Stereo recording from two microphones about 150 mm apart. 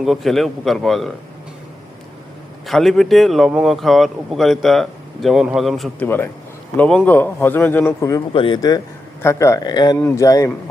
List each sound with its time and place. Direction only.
0.0 s speech: centre (ahead or behind)
2.6 s speech: centre (ahead or behind)
6.0 s a man's voice: 10° left (ahead or behind)
8.3 s speech: 35° left (ahead or behind)